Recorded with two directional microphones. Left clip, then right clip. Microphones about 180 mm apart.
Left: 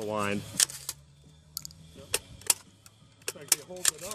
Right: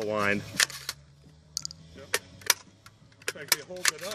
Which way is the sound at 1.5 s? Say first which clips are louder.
Right 6 dB; 20° left (ahead or behind).